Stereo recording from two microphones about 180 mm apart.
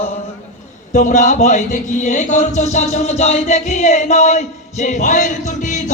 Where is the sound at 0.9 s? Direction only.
40° left (ahead or behind).